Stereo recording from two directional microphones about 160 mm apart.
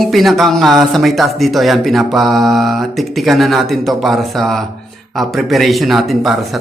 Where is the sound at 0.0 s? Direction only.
Centre (ahead or behind).